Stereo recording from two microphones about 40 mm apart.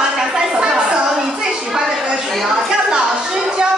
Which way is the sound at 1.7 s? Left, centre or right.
Centre.